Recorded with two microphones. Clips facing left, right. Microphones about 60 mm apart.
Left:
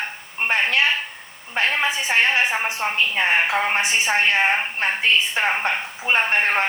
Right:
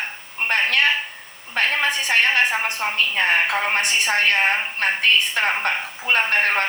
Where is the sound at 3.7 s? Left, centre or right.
Right.